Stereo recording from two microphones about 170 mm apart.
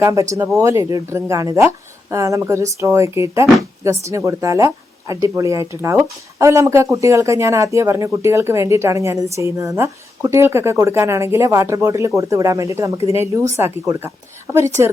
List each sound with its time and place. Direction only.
0.0 s speech: 20° right (ahead or behind)